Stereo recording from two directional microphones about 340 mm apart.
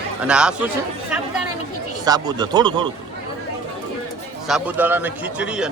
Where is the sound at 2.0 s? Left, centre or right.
Centre.